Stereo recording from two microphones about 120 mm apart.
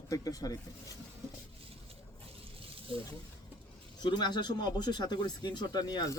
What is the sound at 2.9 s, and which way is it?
Speech, 45° right (ahead or behind).